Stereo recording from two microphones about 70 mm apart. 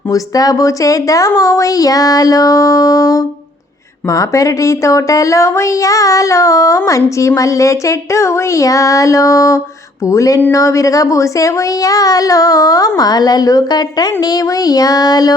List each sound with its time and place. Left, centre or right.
0.1 s a woman's voice: left
13.0 s speech: left